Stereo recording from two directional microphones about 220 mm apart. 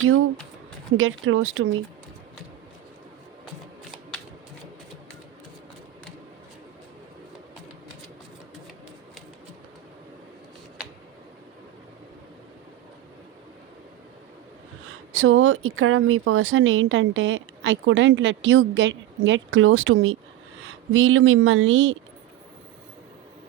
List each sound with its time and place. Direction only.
0.9 s speech: 65° right (ahead or behind)
15.1 s speech: 65° right (ahead or behind)